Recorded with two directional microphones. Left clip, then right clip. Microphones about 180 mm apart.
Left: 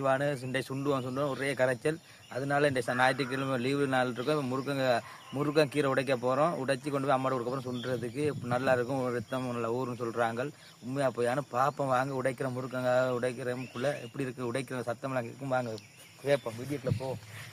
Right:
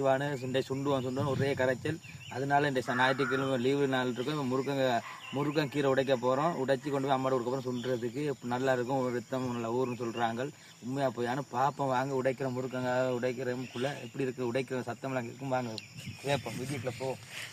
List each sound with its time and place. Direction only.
0.0 s speech: 20° left (ahead or behind)